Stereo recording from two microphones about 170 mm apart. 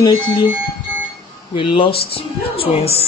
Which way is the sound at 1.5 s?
30° left (ahead or behind).